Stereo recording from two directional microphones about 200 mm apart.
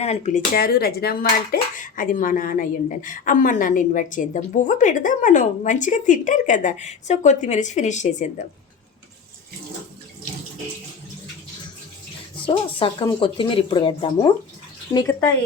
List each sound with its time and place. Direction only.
0.0 s a child's voice: 35° left (ahead or behind)
0.5 s a child's voice: 50° left (ahead or behind)
12.5 s speech: 25° left (ahead or behind)